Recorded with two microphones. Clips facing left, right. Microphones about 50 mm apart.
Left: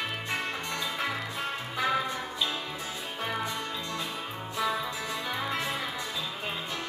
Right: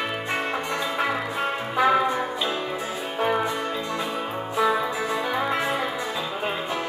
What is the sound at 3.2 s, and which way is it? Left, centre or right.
Music, right.